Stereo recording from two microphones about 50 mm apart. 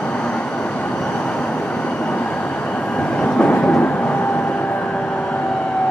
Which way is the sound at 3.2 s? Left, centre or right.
Left.